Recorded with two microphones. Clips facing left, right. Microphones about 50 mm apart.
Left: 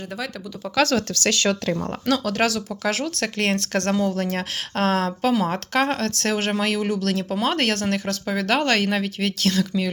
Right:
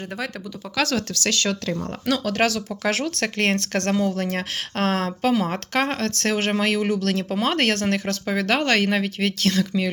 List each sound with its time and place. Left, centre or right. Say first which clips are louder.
0.8 s speech: left 3 dB; centre
2.2 s speech: even; centre
2.8 s speech: right 1 dB; right
3.3 s speech: right 1 dB; right
3.7 s speech: even; centre